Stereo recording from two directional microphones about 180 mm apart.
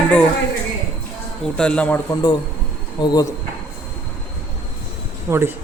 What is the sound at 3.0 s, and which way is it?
Speech, 25° left (ahead or behind).